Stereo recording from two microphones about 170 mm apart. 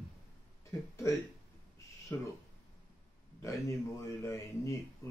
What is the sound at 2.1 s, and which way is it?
Speech, 15° left (ahead or behind).